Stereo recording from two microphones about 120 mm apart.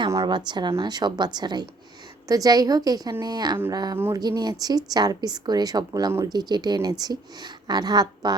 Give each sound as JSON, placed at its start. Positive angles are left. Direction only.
{"t": 0.3, "sound": "a woman's voice", "side_deg": -40}
{"t": 3.9, "sound": "speech", "side_deg": -20}
{"t": 4.2, "sound": "a woman's voice", "side_deg": -35}